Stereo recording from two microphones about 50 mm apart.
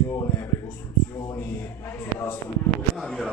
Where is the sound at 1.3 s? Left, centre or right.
Left.